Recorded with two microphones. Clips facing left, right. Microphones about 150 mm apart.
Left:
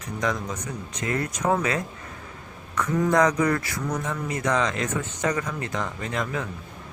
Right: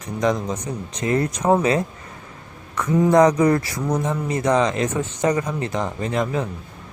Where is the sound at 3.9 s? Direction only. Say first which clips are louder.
Right 6 dB; 15° right (ahead or behind).